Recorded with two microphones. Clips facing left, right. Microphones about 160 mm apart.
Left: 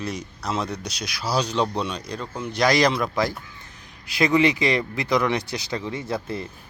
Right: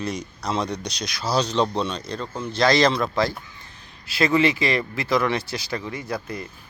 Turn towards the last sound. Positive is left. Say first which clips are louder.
# left 2 dB
turn(degrees=25)  # may be behind; listen again after turning